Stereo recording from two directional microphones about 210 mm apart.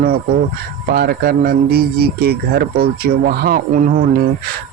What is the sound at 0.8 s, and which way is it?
Speech, 45° right (ahead or behind).